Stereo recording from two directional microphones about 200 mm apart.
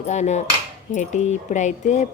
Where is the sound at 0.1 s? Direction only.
35° left (ahead or behind).